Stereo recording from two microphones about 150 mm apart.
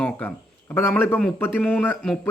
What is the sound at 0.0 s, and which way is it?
Speech, 10° left (ahead or behind).